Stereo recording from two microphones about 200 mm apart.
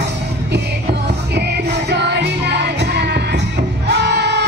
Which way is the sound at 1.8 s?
60° right (ahead or behind).